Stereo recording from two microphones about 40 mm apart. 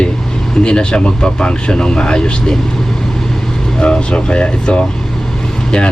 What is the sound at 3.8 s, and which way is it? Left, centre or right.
Speech, left.